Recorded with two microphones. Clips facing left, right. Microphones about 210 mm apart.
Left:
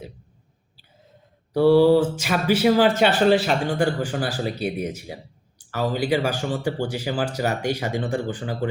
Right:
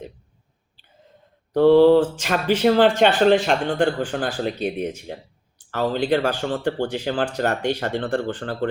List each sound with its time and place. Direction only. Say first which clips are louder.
1.5 s speech: right 2 dB; 10° left (ahead or behind)